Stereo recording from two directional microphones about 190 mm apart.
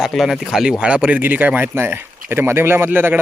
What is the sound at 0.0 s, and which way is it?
Speech, centre (ahead or behind).